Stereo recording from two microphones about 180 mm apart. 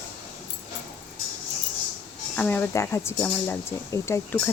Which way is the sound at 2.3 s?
10° left (ahead or behind).